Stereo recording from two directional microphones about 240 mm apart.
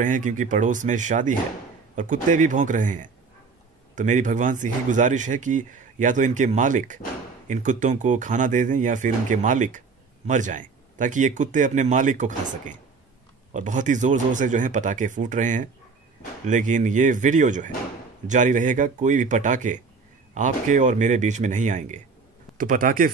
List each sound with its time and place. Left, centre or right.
0.0 s speech: right